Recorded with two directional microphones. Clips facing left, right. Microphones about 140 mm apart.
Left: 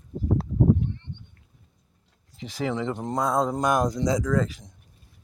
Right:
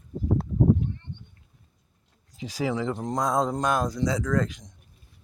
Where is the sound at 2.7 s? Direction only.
Centre (ahead or behind).